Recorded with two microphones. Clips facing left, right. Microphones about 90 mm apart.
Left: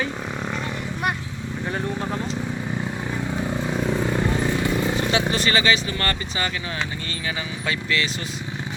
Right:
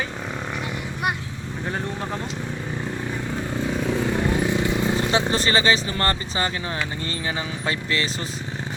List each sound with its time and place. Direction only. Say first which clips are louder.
5.1 s speech: right 1 dB; 35° right (ahead or behind)
7.7 s speech: left 1 dB; 35° right (ahead or behind)